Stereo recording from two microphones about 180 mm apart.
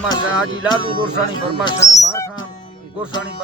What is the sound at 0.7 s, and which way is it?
Speech, 30° left (ahead or behind).